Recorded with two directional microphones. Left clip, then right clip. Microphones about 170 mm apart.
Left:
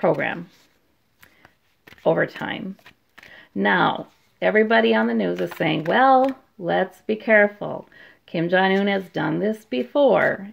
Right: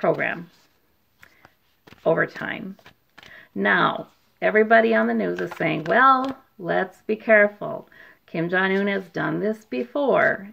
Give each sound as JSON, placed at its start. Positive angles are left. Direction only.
{"t": 0.0, "sound": "speech", "side_deg": 45}
{"t": 2.0, "sound": "speech", "side_deg": 45}
{"t": 3.3, "sound": "a sound", "side_deg": 40}
{"t": 4.4, "sound": "speech", "side_deg": 40}